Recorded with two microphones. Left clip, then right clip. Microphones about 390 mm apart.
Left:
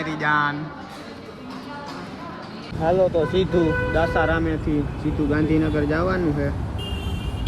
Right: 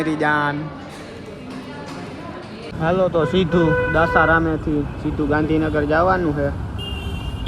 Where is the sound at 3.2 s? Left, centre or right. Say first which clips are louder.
Right 2 dB; right.